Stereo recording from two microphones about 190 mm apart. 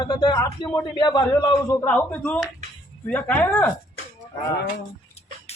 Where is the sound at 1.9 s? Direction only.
10° left (ahead or behind).